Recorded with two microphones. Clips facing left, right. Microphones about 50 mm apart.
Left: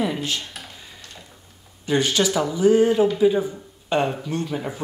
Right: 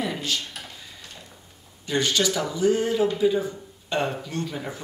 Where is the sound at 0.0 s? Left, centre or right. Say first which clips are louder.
Left 3 dB; centre.